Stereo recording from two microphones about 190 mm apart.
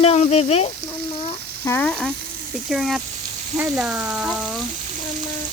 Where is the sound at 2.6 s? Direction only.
Centre (ahead or behind).